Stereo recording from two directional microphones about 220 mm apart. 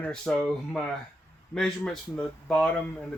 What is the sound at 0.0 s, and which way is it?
Speech, 5° left (ahead or behind).